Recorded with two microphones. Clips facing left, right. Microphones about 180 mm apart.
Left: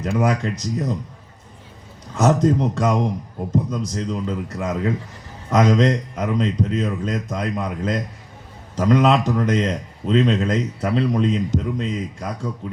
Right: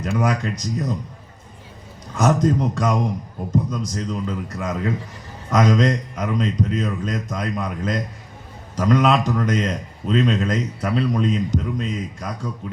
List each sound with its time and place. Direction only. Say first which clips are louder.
0.0 s a man's voice: left 1 dB; 25° left (ahead or behind)
2.1 s a man's voice: left 1 dB; 25° left (ahead or behind)